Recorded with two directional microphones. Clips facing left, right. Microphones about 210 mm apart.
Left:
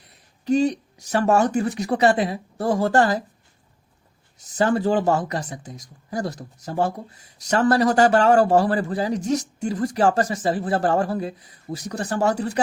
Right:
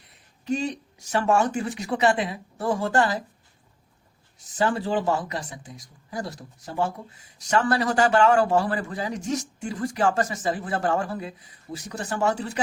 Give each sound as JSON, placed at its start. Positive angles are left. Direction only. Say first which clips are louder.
{"t": 0.4, "sound": "a man's voice", "louder": "left 7 dB", "side_deg": 40}
{"t": 4.5, "sound": "a man's voice", "louder": "left 5 dB", "side_deg": 45}